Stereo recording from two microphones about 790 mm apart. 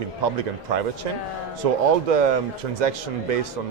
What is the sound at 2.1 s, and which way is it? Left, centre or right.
Speech, right.